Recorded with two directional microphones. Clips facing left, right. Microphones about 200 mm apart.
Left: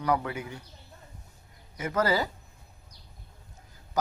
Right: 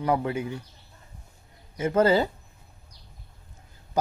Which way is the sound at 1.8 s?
25° right (ahead or behind).